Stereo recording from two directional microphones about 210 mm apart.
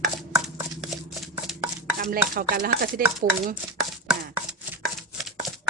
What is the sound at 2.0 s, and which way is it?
Speech, 45° right (ahead or behind).